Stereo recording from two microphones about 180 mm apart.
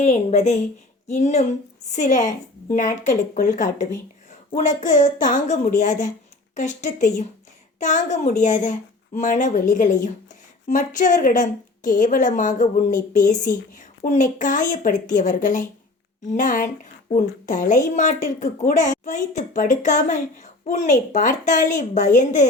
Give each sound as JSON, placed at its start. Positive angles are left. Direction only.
{"t": 0.0, "sound": "a woman's voice", "side_deg": 40}
{"t": 4.3, "sound": "a sound", "side_deg": 45}
{"t": 4.8, "sound": "a woman's voice", "side_deg": 45}